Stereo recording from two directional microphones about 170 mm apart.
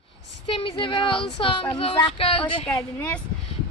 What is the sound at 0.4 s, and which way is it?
A woman's voice, 30° left (ahead or behind).